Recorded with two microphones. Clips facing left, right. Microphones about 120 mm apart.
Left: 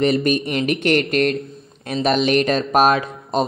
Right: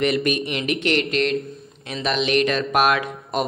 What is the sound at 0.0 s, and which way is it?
Speech, 35° left (ahead or behind).